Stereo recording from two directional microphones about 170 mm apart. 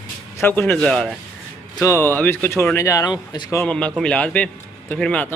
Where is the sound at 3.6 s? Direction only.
5° left (ahead or behind).